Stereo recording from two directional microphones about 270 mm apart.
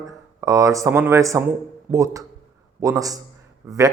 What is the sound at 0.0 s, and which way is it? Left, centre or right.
A man's voice, centre.